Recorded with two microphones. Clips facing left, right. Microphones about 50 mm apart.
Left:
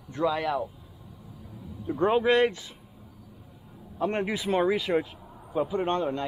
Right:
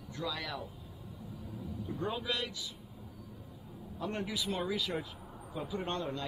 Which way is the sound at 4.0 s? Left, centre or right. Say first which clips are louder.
Left 9 dB; left.